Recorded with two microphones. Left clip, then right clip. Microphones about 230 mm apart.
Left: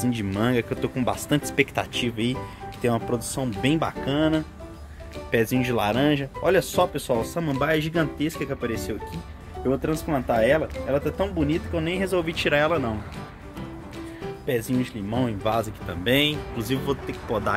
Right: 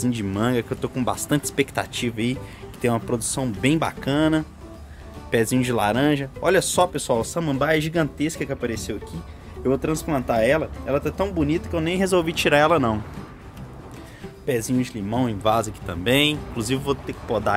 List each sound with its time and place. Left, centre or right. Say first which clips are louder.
0.0 s speech: right 1 dB; centre; by 12.9 s right
14.4 s speech: right 2 dB; centre